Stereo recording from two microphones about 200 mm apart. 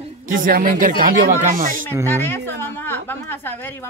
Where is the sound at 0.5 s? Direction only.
45° right (ahead or behind).